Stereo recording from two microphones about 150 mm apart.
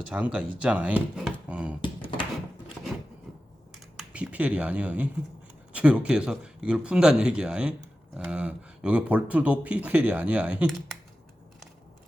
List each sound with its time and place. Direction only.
0.1 s speech: 10° right (ahead or behind)
1.8 s a sound: 35° left (ahead or behind)
3.9 s speech: 10° right (ahead or behind)